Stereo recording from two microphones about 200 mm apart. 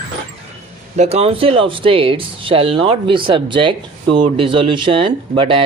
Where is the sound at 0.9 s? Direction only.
35° right (ahead or behind).